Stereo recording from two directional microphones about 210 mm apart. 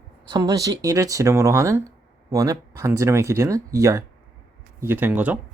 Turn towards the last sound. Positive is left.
turn(degrees=-5)  # may be behind; listen again after turning